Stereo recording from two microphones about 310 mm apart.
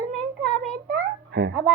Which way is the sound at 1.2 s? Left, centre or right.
Right.